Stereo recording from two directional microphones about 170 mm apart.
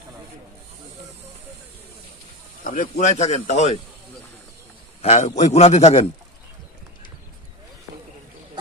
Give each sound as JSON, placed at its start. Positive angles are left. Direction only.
{"t": 2.6, "sound": "speech", "side_deg": 50}
{"t": 5.0, "sound": "a man's voice", "side_deg": 40}